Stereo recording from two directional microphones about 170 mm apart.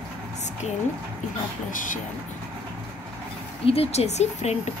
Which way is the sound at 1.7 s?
50° left (ahead or behind).